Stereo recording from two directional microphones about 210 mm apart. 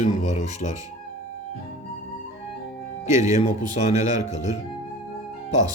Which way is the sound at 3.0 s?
35° left (ahead or behind).